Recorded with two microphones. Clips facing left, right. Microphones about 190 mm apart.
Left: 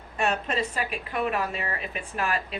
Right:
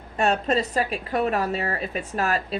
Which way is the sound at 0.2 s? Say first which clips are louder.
Right 5 dB; 40° right (ahead or behind).